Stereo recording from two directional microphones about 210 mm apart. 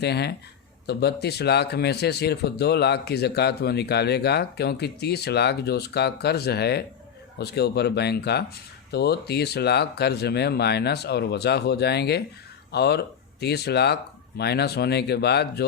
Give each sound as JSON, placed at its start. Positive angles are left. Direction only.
{"t": 0.0, "sound": "speech", "side_deg": 50}